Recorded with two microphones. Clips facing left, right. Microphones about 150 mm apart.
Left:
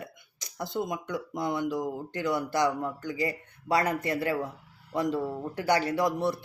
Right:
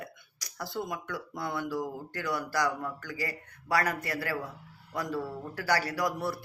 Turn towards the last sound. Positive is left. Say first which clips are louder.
# left 5 dB
turn(degrees=20)  # may be behind; listen again after turning